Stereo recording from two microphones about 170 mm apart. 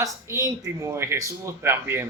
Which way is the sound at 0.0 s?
20° right (ahead or behind).